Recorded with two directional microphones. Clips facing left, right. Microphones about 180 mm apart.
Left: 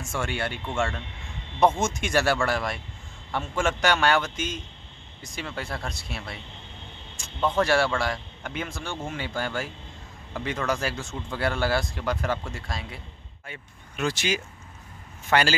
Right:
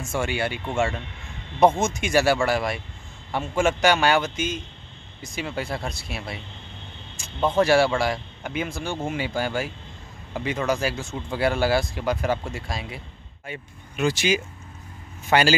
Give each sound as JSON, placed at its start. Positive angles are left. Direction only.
{"t": 0.1, "sound": "speech", "side_deg": -10}
{"t": 7.3, "sound": "speech", "side_deg": -20}
{"t": 7.6, "sound": "speech", "side_deg": -10}